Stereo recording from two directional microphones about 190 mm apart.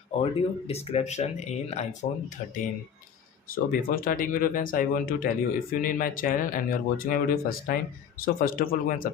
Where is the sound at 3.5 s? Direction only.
50° left (ahead or behind).